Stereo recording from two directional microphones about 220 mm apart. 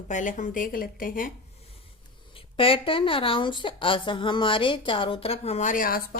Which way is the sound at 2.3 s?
25° left (ahead or behind).